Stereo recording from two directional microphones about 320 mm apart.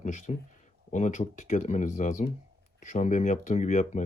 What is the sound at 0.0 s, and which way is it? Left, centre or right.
Speech, left.